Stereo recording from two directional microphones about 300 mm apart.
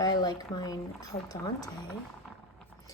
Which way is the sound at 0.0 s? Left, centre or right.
Centre.